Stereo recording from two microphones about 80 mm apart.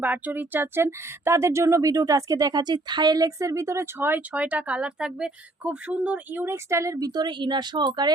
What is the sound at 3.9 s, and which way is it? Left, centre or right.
Speech, right.